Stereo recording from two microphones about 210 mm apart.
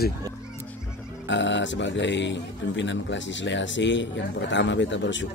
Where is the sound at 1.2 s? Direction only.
60° left (ahead or behind).